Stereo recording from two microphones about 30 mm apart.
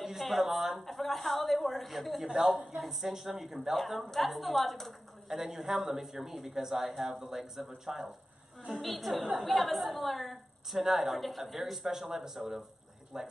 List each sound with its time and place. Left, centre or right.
0.4 s speech: centre
0.8 s a woman's voice: centre
2.2 s a woman's voice: right
2.8 s a man's voice: centre
3.7 s a woman's voice: centre
5.3 s a man's voice: centre
8.8 s a woman's voice: centre
10.7 s a man's voice: centre
11.1 s a woman's voice: centre
13.1 s a woman's voice: centre